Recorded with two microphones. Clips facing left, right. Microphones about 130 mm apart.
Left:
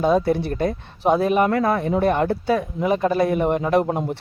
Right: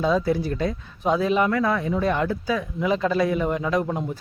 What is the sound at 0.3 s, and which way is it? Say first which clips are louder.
Speech: left 2 dB; 60° left (ahead or behind).